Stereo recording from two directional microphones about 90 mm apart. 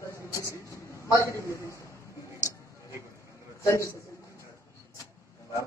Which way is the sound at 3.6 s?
35° left (ahead or behind).